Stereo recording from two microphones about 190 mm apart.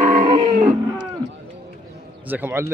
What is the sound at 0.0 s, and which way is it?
Wild animals, 40° right (ahead or behind).